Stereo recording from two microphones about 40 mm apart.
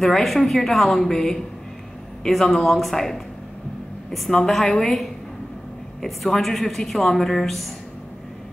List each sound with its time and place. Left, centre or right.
0.0 s a woman's voice: centre
4.5 s a woman's voice: centre
6.0 s a woman's voice: centre